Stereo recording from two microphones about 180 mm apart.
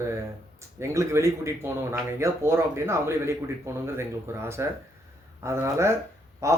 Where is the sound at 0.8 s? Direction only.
15° right (ahead or behind).